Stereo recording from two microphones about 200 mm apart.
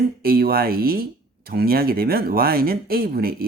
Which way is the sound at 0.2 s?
50° right (ahead or behind).